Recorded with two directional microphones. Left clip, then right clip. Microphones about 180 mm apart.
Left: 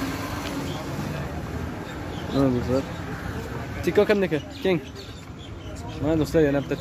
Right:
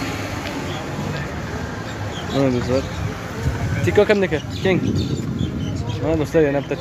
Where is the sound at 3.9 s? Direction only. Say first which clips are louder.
Right 4 dB; 10° left (ahead or behind).